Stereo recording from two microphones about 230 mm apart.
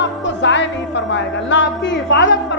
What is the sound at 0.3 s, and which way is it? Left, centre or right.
Music, left.